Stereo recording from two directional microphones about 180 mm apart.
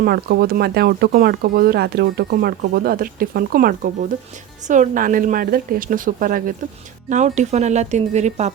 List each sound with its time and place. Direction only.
0.0 s speech: 60° right (ahead or behind); by 8.5 s 40° right (ahead or behind)